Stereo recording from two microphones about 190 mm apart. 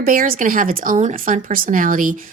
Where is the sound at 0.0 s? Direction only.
50° right (ahead or behind).